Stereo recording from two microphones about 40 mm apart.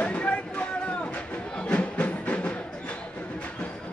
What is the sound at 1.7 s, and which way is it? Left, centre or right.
Music, left.